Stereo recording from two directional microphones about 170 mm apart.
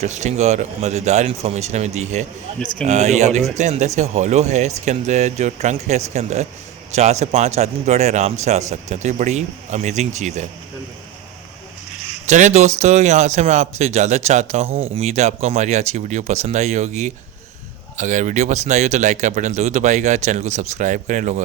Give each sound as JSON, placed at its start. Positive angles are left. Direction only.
{"t": 0.0, "sound": "speech", "side_deg": -40}
{"t": 12.3, "sound": "speech", "side_deg": -45}